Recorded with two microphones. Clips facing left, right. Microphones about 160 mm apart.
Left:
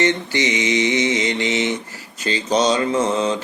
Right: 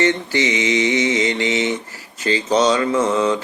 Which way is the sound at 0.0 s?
20° left (ahead or behind).